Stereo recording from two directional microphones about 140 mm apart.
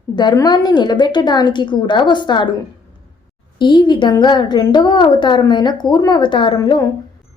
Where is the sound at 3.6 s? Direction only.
35° left (ahead or behind).